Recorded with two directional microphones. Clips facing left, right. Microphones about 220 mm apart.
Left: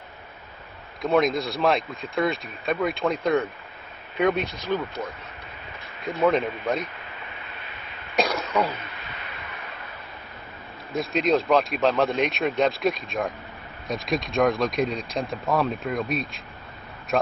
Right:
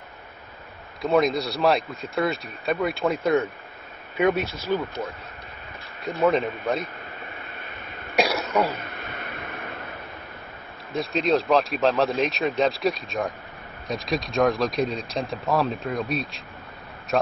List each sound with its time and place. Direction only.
1.0 s speech: centre (ahead or behind)
6.2 s speech: centre (ahead or behind)
8.6 s a sound: 50° right (ahead or behind)
10.9 s speech: centre (ahead or behind)